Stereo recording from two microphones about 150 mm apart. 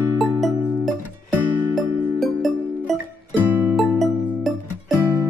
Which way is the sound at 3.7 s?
Centre (ahead or behind).